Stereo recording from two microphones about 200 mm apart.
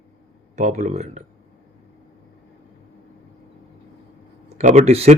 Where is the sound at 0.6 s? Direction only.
35° right (ahead or behind).